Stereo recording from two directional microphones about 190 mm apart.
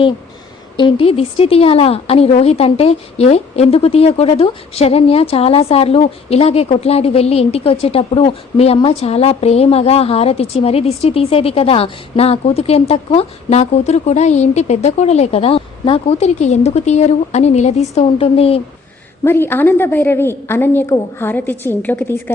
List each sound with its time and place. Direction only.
0.8 s a woman's voice: 25° left (ahead or behind)
19.2 s a woman's voice: 10° left (ahead or behind)